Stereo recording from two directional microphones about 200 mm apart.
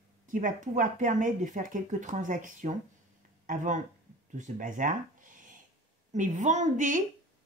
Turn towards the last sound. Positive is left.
turn(degrees=-40)  # may be behind; listen again after turning